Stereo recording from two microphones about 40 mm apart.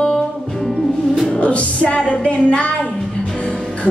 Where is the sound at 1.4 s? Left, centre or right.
Left.